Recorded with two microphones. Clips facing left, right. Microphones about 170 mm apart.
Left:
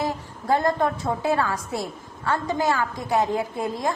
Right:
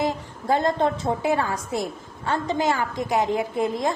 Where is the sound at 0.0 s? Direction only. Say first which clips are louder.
Right 2 dB; 20° right (ahead or behind).